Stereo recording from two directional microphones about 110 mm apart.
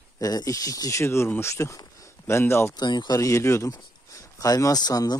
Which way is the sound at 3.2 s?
30° left (ahead or behind).